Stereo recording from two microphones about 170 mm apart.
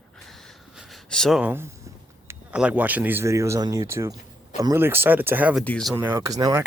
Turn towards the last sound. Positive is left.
turn(degrees=-20)  # may be behind; listen again after turning